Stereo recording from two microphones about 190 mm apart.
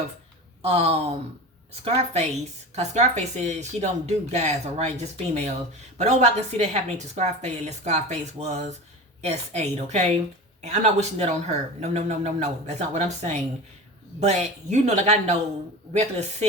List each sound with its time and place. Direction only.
0.6 s speech: 30° right (ahead or behind)